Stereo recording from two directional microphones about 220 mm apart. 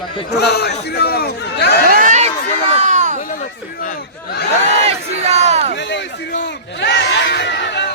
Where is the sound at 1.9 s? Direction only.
35° right (ahead or behind).